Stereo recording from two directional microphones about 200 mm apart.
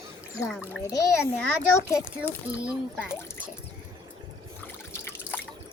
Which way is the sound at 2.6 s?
5° right (ahead or behind).